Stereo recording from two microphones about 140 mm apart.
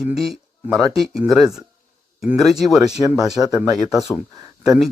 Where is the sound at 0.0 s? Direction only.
Centre (ahead or behind).